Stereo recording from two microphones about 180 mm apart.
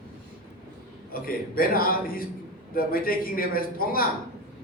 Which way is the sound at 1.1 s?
55° left (ahead or behind).